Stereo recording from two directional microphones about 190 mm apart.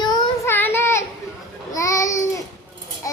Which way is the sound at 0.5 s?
10° left (ahead or behind).